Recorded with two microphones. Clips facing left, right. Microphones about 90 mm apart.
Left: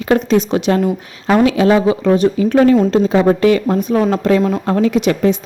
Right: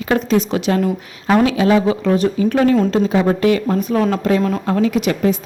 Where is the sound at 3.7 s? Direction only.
20° left (ahead or behind).